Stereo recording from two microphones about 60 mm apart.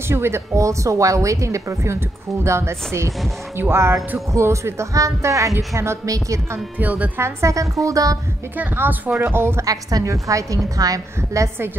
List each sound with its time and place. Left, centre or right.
0.1 s a woman's voice: right
0.6 s a woman's voice: right
6.8 s a woman's voice: right
7.2 s a woman's voice: right
8.5 s a woman's voice: right
9.7 s a woman's voice: right
11.1 s a woman's voice: right